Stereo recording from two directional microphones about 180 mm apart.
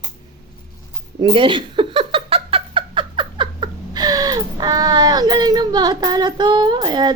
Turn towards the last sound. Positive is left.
turn(degrees=-25)  # may be behind; listen again after turning